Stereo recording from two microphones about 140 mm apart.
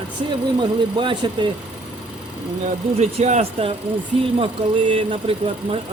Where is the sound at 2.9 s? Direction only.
50° right (ahead or behind).